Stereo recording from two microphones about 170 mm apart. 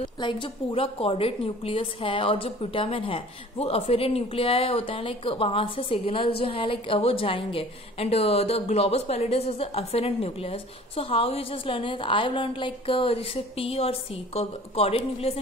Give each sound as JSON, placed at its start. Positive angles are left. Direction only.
{"t": 0.0, "sound": "a woman's voice", "side_deg": 30}